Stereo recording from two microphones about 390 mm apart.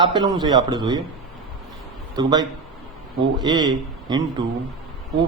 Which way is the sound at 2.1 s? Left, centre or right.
Centre.